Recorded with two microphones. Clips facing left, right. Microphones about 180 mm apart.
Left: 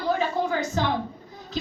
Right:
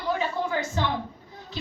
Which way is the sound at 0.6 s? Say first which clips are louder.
Left 2 dB; 40° left (ahead or behind).